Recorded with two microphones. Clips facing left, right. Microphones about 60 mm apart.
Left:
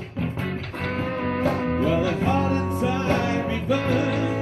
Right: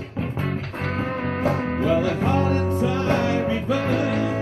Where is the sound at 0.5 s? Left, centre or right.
Centre.